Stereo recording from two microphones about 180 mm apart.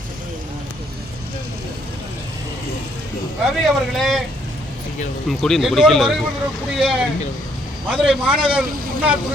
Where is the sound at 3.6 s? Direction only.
Centre (ahead or behind).